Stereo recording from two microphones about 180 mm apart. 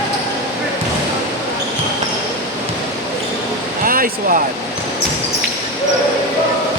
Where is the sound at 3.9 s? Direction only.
50° right (ahead or behind).